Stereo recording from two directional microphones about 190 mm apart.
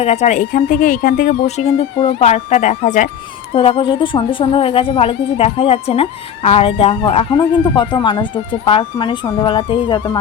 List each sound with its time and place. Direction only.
0.0 s speech: 35° left (ahead or behind)
3.5 s speech: 30° left (ahead or behind)